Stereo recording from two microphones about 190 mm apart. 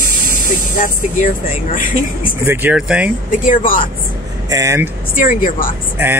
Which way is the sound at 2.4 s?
10° right (ahead or behind).